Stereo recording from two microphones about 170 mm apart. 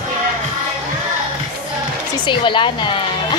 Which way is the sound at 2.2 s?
30° left (ahead or behind).